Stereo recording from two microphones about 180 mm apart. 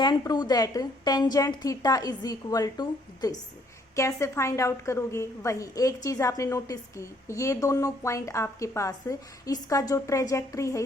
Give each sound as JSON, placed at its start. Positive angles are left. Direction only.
{"t": 0.0, "sound": "a woman's voice", "side_deg": 25}